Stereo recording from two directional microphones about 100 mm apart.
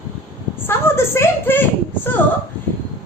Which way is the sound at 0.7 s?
25° left (ahead or behind).